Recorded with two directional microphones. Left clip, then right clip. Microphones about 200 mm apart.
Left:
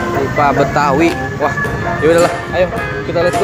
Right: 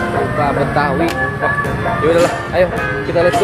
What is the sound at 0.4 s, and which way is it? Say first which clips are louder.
Speech: left 5 dB; 35° left (ahead or behind).